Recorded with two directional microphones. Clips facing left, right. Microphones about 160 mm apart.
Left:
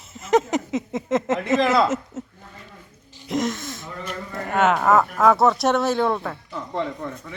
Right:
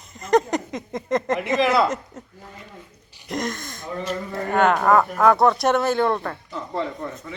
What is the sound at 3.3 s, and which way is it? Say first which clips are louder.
Speech: left 3 dB; centre (ahead or behind).